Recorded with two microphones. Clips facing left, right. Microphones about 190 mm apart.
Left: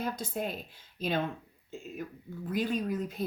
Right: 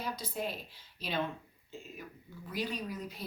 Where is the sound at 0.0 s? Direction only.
50° left (ahead or behind).